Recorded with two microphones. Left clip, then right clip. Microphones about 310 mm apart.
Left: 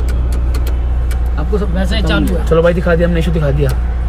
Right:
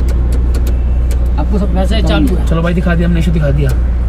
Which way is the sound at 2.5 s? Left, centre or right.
Left.